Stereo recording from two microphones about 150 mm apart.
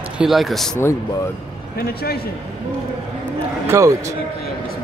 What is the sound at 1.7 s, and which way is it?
Speech, 90° left.